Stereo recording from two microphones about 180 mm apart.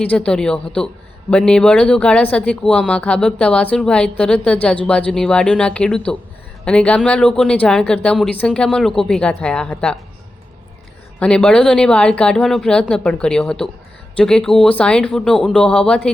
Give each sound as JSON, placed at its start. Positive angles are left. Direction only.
{"t": 0.0, "sound": "speech", "side_deg": 5}
{"t": 11.2, "sound": "speech", "side_deg": 5}